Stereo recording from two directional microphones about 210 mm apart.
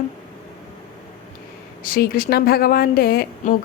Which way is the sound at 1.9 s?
45° left (ahead or behind).